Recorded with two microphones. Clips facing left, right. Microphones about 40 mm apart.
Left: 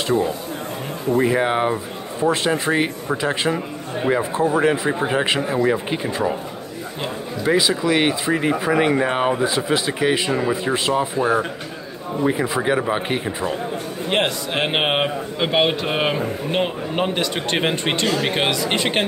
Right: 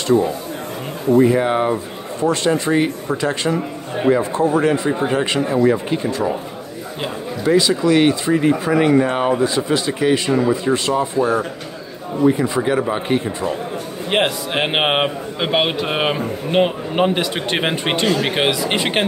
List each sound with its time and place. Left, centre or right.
1.1 s speech: centre
7.4 s speech: centre
14.1 s a man's voice: centre